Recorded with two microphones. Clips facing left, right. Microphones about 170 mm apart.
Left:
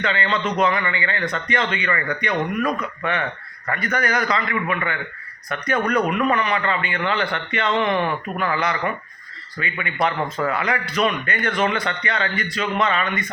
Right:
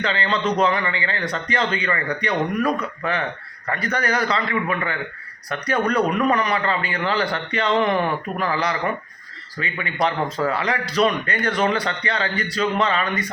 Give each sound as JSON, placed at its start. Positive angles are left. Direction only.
{"t": 0.0, "sound": "a man's voice", "side_deg": -30}